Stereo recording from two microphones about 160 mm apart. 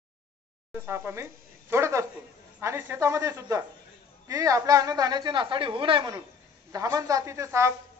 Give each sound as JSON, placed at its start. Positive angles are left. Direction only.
{"t": 0.7, "sound": "a woman's voice", "side_deg": -15}